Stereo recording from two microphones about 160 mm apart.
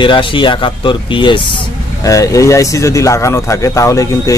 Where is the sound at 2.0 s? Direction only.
20° left (ahead or behind).